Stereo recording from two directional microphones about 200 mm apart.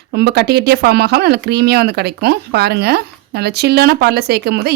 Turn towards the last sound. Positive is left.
turn(degrees=-55)  # may be behind; listen again after turning